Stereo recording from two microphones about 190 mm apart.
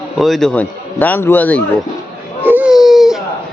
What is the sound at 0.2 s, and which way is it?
A man's voice, centre (ahead or behind).